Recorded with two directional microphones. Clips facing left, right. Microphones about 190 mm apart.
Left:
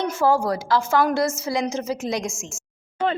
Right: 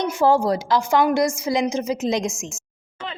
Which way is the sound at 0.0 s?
15° right (ahead or behind).